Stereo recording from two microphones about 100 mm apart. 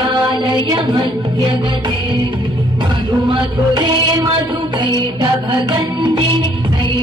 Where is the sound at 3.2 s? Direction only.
50° right (ahead or behind).